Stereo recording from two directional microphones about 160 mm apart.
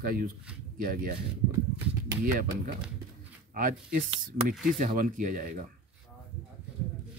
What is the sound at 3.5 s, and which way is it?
Speech, 60° right (ahead or behind).